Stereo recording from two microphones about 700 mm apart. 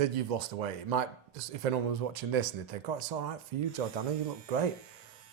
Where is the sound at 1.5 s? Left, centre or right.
Right.